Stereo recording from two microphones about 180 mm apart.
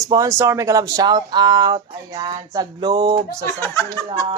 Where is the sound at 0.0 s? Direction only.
20° right (ahead or behind).